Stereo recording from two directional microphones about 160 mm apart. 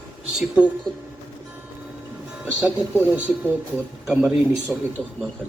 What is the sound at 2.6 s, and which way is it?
Speech, 10° right (ahead or behind).